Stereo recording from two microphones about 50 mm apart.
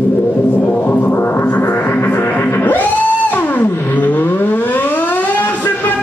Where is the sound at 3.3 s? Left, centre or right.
Left.